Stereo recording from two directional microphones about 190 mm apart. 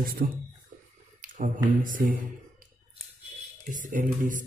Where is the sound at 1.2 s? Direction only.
45° right (ahead or behind).